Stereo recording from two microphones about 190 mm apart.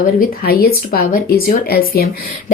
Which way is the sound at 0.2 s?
50° left (ahead or behind).